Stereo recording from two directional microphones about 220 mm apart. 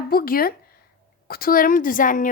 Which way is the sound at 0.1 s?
40° left (ahead or behind).